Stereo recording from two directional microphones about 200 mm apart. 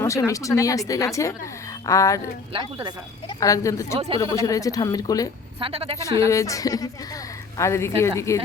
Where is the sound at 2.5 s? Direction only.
25° right (ahead or behind).